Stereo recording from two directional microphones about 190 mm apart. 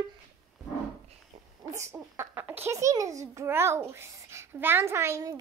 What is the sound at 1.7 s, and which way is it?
A child's voice, 15° right (ahead or behind).